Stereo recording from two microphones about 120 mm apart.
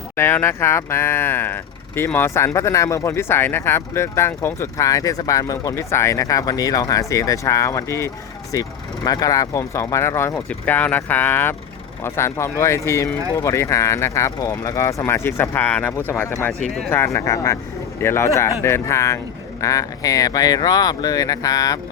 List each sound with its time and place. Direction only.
0.2 s speech: 20° left (ahead or behind)
10.3 s speech: 10° left (ahead or behind); by 21.8 s 30° left (ahead or behind)